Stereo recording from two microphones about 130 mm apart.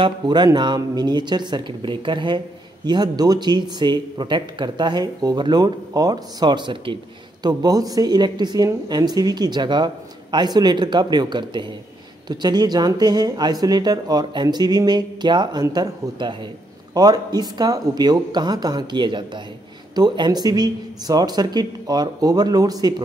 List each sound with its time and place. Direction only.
0.0 s speech: 35° right (ahead or behind)